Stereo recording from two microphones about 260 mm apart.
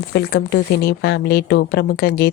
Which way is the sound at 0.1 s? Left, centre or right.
Left.